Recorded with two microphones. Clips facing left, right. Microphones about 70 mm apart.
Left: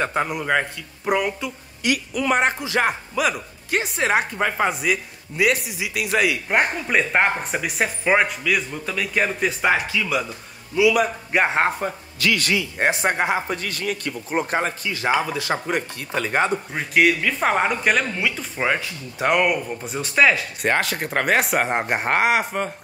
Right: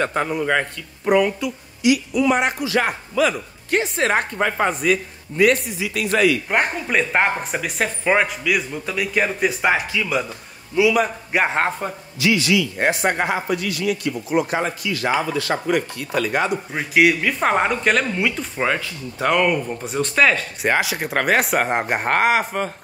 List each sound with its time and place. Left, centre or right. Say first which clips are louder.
0.0 s speech: right 2 dB; centre
1.8 s a man's voice: right 5 dB; left
2.6 s speech: right 1 dB; left
6.5 s speech: even; centre
10.8 s a man's voice: right 1 dB; right
11.3 s speech: even; centre
12.2 s a man's voice: right 3 dB; left
12.8 s speech: right 1 dB; left
13.5 s speech: right 4 dB; left
14.9 s speech: right 1 dB; left
16.7 s speech: right 3 dB; centre
18.8 s speech: right 1 dB; centre
19.7 s speech: right 3 dB; centre
20.7 s speech: right 2 dB; centre